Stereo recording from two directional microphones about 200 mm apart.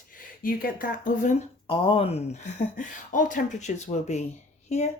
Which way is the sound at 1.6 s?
25° left (ahead or behind).